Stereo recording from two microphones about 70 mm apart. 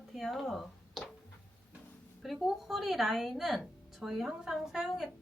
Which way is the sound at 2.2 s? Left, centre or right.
Centre.